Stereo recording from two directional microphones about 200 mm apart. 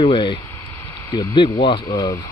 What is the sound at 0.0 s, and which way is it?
Speech, 25° left (ahead or behind).